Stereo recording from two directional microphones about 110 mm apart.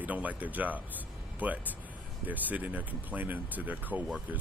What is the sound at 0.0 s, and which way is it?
Speech, 15° right (ahead or behind).